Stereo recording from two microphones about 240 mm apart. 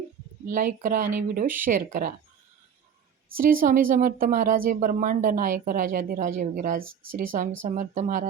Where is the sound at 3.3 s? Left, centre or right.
Right.